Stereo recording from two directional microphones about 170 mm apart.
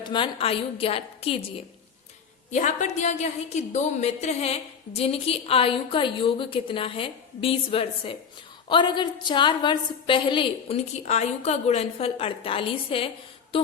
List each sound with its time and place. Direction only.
0.0 s a woman's voice: 30° left (ahead or behind)
2.5 s a woman's voice: 45° left (ahead or behind)